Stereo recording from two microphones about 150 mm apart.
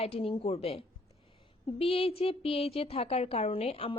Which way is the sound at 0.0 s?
40° left (ahead or behind).